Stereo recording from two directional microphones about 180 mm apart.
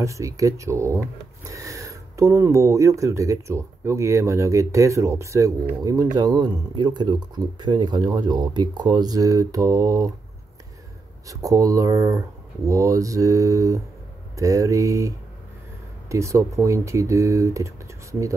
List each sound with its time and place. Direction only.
0.0 s speech: 15° right (ahead or behind)
11.2 s speech: 20° right (ahead or behind)